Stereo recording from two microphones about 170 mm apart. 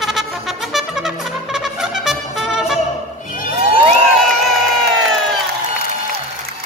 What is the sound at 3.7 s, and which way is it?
Cheering, 35° right (ahead or behind).